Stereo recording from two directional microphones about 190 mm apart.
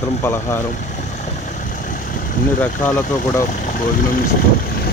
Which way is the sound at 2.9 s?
15° left (ahead or behind).